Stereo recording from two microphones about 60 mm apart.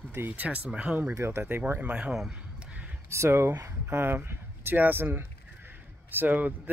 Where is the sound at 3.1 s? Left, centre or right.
Right.